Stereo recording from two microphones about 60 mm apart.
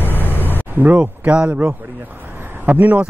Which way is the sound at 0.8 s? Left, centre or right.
Right.